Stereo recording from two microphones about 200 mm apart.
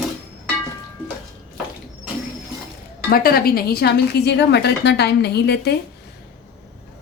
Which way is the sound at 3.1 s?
50° left (ahead or behind).